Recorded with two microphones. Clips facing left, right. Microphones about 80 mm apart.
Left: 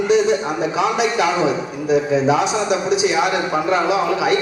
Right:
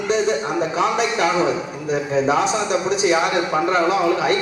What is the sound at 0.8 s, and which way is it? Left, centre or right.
Speech, right.